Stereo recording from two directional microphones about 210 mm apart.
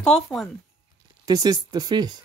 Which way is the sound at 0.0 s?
Centre (ahead or behind).